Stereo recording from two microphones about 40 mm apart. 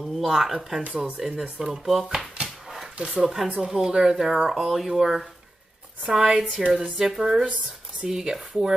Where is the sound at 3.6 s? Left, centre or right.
Centre.